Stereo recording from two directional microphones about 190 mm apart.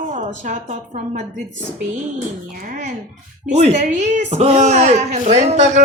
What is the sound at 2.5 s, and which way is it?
A woman's voice, 45° right (ahead or behind).